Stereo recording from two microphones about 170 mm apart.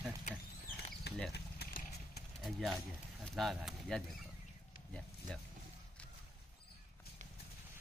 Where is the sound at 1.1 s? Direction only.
75° left (ahead or behind).